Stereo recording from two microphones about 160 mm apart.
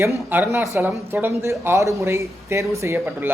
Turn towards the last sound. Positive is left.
turn(degrees=-15)  # may be behind; listen again after turning